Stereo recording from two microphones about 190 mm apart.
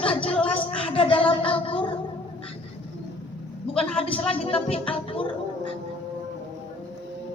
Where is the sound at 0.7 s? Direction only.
30° left (ahead or behind).